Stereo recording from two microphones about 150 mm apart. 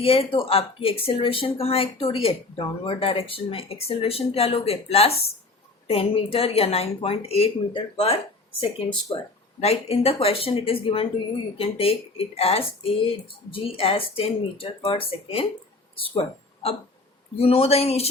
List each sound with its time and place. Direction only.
0.0 s speech: 40° left (ahead or behind)
17.3 s speech: 40° left (ahead or behind)